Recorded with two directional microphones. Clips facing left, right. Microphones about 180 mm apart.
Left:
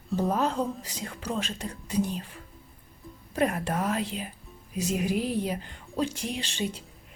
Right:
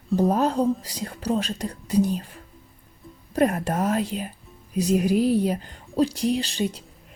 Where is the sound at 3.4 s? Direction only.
45° right (ahead or behind).